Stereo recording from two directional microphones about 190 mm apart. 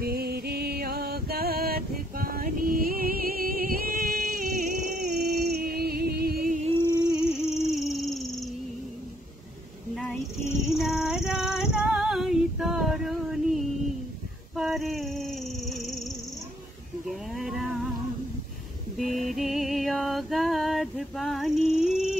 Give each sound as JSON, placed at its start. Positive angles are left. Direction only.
{"t": 0.0, "sound": "music", "side_deg": -55}
{"t": 7.2, "sound": "music", "side_deg": 0}
{"t": 10.7, "sound": "female singing", "side_deg": 0}
{"t": 14.5, "sound": "a sound", "side_deg": 0}
{"t": 17.1, "sound": "a sound", "side_deg": 0}
{"t": 18.9, "sound": "music", "side_deg": 0}